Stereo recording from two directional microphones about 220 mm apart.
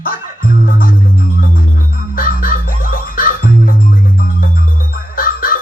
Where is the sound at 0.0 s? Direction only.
40° left (ahead or behind).